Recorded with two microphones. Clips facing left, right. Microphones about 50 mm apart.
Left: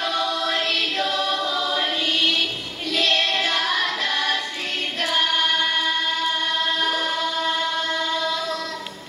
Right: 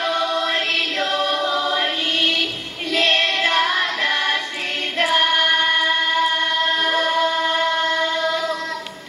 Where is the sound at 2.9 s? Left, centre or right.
Right.